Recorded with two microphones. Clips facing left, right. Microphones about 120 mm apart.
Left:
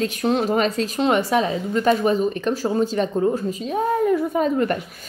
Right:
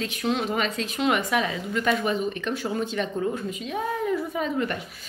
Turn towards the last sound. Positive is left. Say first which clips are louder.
# left 7 dB
turn(degrees=45)  # may be behind; listen again after turning